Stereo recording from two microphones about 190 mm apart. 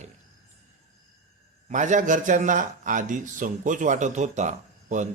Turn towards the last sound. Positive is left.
turn(degrees=-40)  # may be behind; listen again after turning